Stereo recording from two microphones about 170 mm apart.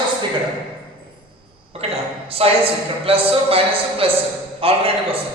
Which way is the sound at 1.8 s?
35° right (ahead or behind).